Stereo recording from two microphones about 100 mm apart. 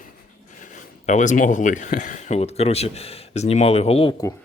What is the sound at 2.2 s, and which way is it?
Speech, 90° left.